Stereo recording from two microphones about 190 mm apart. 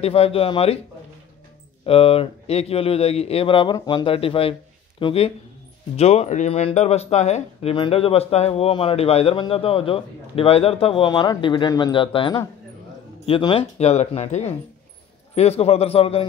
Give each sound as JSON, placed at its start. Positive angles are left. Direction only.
{"t": 0.0, "sound": "speech", "side_deg": 30}
{"t": 1.9, "sound": "speech", "side_deg": 30}